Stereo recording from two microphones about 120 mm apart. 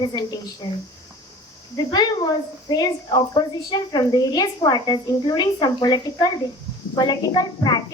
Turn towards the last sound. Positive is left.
turn(degrees=35)  # may be behind; listen again after turning